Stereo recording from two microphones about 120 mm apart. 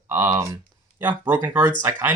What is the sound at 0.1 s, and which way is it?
Speech, 25° right (ahead or behind).